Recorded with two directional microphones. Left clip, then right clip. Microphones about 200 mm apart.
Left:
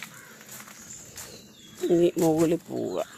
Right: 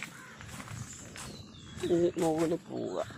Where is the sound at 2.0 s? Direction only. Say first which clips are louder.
Left 7 dB; 35° left (ahead or behind).